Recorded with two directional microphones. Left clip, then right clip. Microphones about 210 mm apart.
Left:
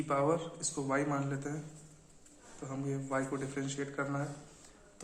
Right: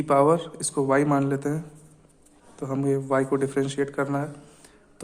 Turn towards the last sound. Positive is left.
turn(degrees=-50)  # may be behind; listen again after turning